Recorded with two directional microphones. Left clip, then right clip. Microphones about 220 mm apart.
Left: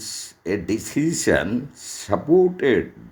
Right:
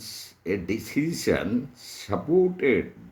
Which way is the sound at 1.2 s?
15° left (ahead or behind).